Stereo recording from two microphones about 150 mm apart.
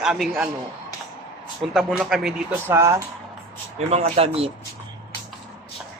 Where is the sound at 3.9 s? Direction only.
45° right (ahead or behind).